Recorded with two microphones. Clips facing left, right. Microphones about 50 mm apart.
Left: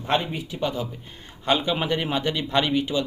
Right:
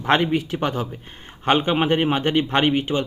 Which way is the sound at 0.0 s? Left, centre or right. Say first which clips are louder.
Right 6 dB; right.